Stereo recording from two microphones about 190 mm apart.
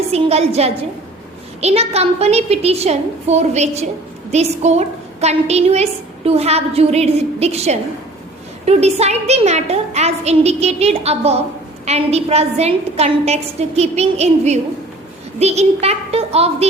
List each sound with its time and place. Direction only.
0.1 s a woman's voice: 35° right (ahead or behind)